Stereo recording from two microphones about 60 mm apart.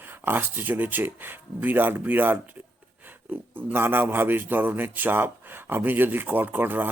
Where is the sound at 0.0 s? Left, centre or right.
Right.